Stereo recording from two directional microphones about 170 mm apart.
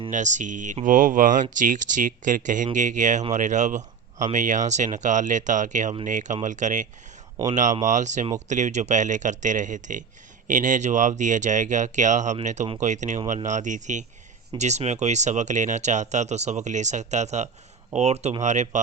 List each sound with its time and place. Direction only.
0.1 s speech: 45° right (ahead or behind)